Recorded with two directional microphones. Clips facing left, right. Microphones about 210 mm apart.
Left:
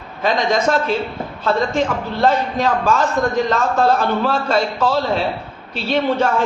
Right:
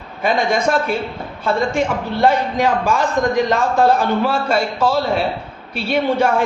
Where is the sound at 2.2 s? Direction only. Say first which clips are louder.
Right 1 dB; 10° right (ahead or behind).